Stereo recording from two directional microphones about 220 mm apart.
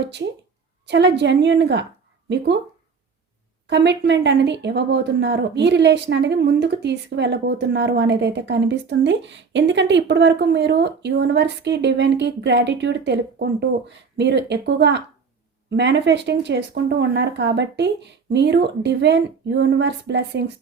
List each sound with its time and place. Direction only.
0.0 s speech: 50° right (ahead or behind)
3.7 s speech: 50° right (ahead or behind)